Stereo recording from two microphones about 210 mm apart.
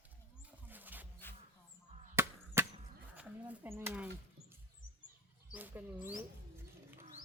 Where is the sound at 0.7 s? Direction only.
10° right (ahead or behind).